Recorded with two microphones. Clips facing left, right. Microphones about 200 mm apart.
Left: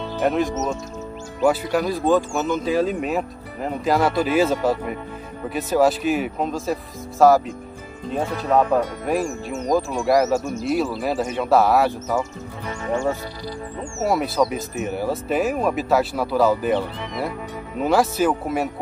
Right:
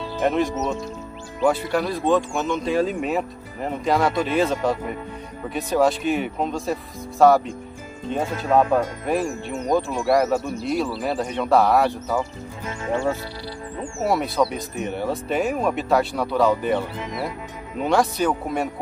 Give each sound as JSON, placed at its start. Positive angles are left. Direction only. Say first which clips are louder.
{"t": 0.2, "sound": "speech", "louder": "even", "side_deg": 0}
{"t": 10.4, "sound": "speech", "louder": "left 1 dB", "side_deg": 45}
{"t": 10.9, "sound": "speech", "louder": "left 1 dB", "side_deg": 5}
{"t": 14.0, "sound": "speech", "louder": "left 1 dB", "side_deg": 0}
{"t": 17.8, "sound": "speech", "louder": "left 2 dB", "side_deg": 5}